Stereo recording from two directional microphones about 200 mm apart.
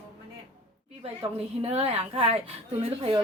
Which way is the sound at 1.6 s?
30° right (ahead or behind).